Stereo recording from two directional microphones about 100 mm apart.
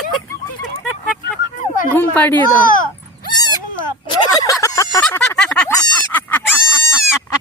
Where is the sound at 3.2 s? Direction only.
45° left (ahead or behind).